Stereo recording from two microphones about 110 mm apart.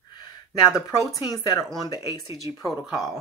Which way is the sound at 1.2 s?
35° left (ahead or behind).